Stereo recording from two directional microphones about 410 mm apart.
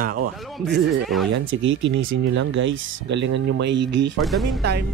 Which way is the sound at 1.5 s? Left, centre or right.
Right.